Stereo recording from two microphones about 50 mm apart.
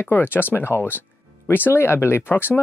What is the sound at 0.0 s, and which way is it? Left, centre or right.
Speech, left.